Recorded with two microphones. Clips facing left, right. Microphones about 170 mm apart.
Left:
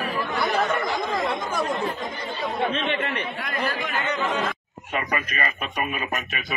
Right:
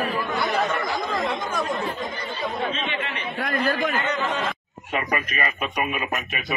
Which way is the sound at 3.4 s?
55° right (ahead or behind).